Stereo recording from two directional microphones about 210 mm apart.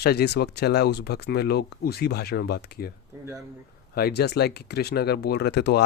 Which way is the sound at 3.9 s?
45° left (ahead or behind).